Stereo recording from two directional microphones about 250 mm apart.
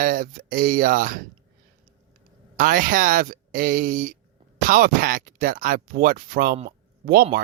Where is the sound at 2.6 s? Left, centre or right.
Right.